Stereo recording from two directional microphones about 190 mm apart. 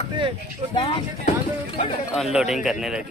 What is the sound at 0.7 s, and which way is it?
Speech, 30° left (ahead or behind).